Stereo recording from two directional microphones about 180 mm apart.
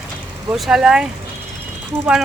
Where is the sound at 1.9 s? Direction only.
15° right (ahead or behind).